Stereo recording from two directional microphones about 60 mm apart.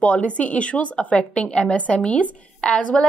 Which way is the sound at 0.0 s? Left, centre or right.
Centre.